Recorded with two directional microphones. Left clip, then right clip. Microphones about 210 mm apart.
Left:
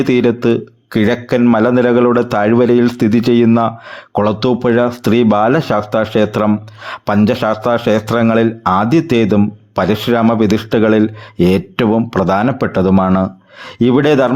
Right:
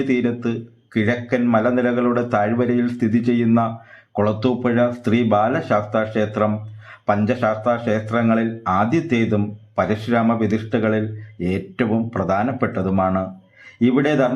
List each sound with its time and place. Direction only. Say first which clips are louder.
0.1 s speech: left 9 dB; 45° left (ahead or behind)